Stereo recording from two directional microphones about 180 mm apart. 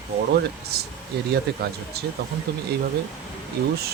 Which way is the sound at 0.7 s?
60° right (ahead or behind).